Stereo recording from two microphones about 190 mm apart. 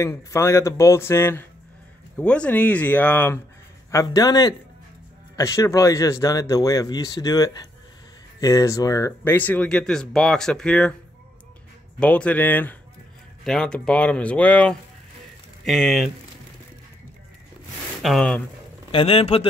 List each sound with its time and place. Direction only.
0.0 s speech: 15° left (ahead or behind)
12.0 s speech: 5° left (ahead or behind)
18.0 s speech: 5° left (ahead or behind)
18.9 s speech: 30° left (ahead or behind)